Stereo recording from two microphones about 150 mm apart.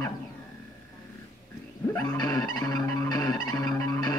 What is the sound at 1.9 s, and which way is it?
Music, 25° left (ahead or behind).